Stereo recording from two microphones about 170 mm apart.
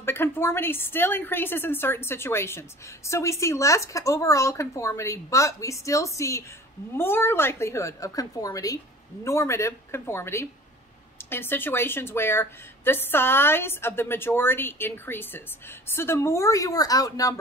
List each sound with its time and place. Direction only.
0.0 s a woman's voice: 15° left (ahead or behind)